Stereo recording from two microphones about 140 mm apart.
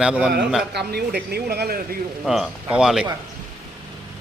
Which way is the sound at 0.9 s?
90° right.